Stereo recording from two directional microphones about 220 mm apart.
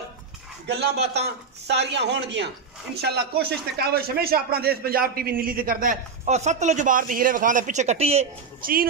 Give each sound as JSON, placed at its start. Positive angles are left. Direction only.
{"t": 0.7, "sound": "a man's voice", "side_deg": -50}
{"t": 8.5, "sound": "speech", "side_deg": -40}